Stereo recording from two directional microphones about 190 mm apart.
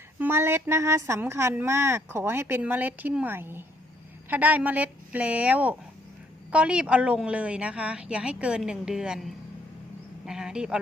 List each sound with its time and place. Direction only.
0.2 s a woman's voice: 10° right (ahead or behind)